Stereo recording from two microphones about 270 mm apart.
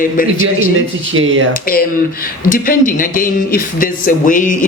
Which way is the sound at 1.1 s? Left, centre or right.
Right.